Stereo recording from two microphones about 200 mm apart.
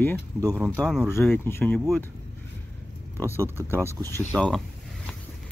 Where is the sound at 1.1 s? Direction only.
10° left (ahead or behind).